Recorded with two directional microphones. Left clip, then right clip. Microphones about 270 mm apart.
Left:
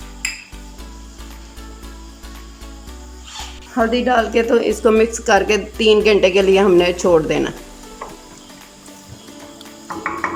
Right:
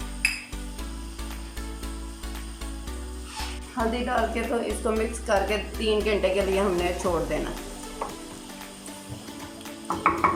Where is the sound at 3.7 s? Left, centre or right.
Left.